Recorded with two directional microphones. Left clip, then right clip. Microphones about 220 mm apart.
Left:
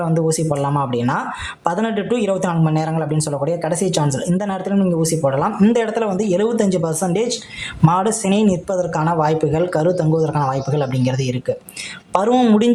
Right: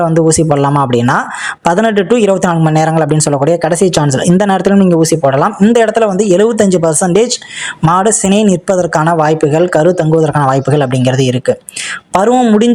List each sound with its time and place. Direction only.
0.0 s a man's voice: 30° right (ahead or behind)